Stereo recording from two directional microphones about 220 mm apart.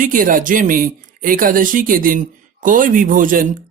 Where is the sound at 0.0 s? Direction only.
40° right (ahead or behind).